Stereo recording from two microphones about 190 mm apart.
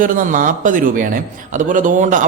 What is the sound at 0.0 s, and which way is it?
A man's voice, 45° right (ahead or behind).